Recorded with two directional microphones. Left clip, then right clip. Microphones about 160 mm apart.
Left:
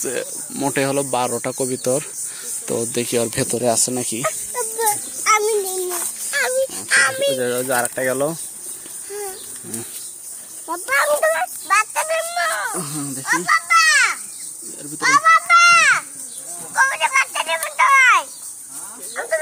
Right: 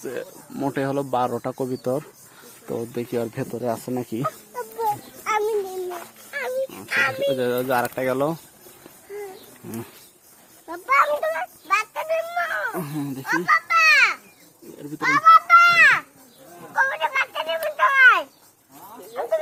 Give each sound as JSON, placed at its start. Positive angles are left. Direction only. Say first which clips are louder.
{"t": 0.0, "sound": "speech", "louder": "left 6 dB", "side_deg": 20}
{"t": 0.5, "sound": "speech", "louder": "left 5 dB", "side_deg": 5}
{"t": 3.8, "sound": "speech", "louder": "left 4 dB", "side_deg": 5}
{"t": 4.8, "sound": "a sound", "louder": "left 3 dB", "side_deg": 90}
{"t": 7.3, "sound": "speech", "louder": "left 2 dB", "side_deg": -15}
{"t": 11.1, "sound": "a sound", "louder": "left 6 dB", "side_deg": 10}
{"t": 12.8, "sound": "speech", "louder": "left 2 dB", "side_deg": -15}
{"t": 13.2, "sound": "children playing", "louder": "left 3 dB", "side_deg": 10}
{"t": 16.7, "sound": "a sound", "louder": "left 5 dB", "side_deg": 5}
{"t": 19.1, "sound": "snake", "louder": "left 2 dB", "side_deg": 20}